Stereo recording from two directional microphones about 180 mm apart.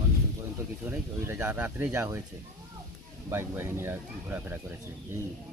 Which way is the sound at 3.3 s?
15° right (ahead or behind).